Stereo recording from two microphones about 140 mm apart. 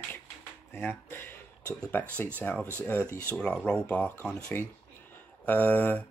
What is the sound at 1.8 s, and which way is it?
Speech, 10° left (ahead or behind).